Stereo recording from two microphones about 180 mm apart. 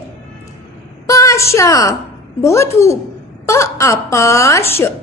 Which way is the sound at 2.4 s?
15° left (ahead or behind).